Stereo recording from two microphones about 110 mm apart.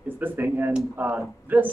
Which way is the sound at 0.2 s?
20° right (ahead or behind).